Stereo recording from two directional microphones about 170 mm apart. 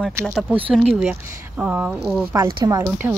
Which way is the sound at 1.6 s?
10° right (ahead or behind).